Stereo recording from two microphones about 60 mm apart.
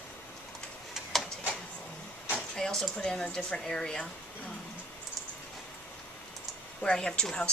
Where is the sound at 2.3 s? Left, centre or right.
Centre.